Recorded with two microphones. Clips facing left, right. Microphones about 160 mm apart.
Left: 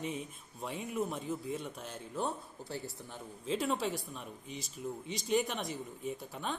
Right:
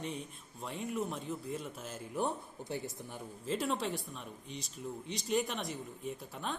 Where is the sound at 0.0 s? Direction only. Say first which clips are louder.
Left 2 dB; centre (ahead or behind).